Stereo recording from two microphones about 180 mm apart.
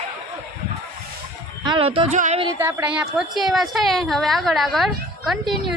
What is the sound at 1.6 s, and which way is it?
Speech, 30° right (ahead or behind).